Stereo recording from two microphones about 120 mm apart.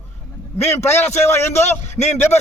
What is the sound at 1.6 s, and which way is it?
Speech, 65° left (ahead or behind).